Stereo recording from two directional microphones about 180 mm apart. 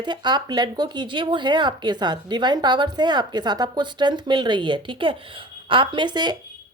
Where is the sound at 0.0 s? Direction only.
25° right (ahead or behind).